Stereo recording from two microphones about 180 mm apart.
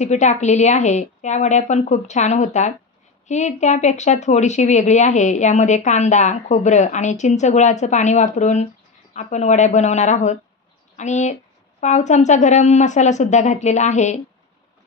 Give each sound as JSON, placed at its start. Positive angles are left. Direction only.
{"t": 0.0, "sound": "speech", "side_deg": 40}